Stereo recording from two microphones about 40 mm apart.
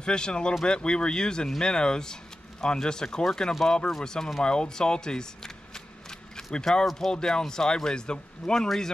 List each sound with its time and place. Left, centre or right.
0.0 s speech: left
6.0 s single-lens reflex camera: centre
7.1 s speech: centre